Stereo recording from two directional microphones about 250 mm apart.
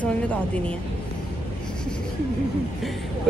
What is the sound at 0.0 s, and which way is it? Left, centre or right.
Speech, centre.